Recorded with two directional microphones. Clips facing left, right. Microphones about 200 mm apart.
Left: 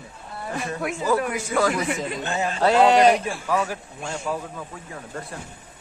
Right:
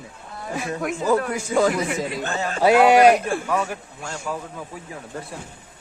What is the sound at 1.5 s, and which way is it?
Speech, 20° right (ahead or behind).